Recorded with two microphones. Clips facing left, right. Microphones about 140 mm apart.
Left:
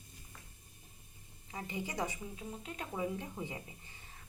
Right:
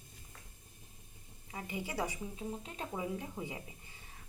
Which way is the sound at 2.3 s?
25° right (ahead or behind).